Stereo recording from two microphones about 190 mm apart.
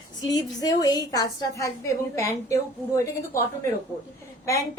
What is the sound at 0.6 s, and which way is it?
A woman's voice, 20° left (ahead or behind).